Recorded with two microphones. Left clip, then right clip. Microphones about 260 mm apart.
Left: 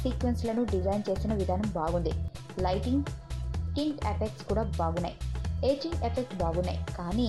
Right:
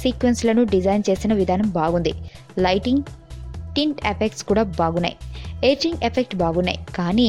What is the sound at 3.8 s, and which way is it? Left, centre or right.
A woman's voice, right.